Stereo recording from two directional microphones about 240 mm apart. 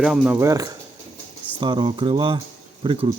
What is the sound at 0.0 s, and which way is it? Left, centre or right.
Speech, centre.